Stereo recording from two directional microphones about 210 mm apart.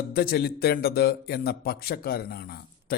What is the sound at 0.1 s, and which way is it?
A man's voice, 45° left (ahead or behind).